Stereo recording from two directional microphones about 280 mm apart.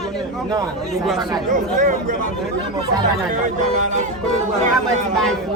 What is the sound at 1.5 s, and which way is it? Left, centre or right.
Speech, right.